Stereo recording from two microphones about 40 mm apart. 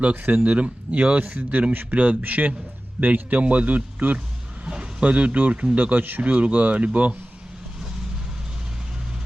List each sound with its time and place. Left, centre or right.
0.0 s speech: right
4.6 s speech: right
6.3 s speech: right